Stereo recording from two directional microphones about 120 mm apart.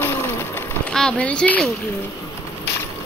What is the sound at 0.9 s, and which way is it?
Speech, 5° left (ahead or behind).